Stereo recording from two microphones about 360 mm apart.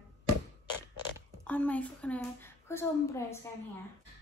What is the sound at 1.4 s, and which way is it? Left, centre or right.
A woman's voice, centre.